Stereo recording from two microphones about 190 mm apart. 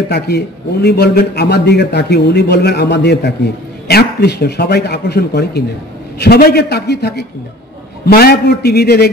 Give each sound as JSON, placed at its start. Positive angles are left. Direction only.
{"t": 0.1, "sound": "a man's voice", "side_deg": 60}